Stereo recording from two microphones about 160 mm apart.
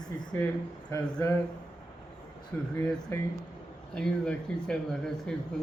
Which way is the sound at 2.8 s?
15° left (ahead or behind).